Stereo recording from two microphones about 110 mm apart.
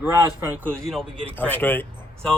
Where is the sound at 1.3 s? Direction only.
15° left (ahead or behind).